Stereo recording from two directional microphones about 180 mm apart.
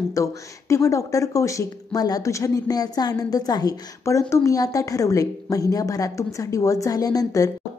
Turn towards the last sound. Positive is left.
turn(degrees=20)  # may be behind; listen again after turning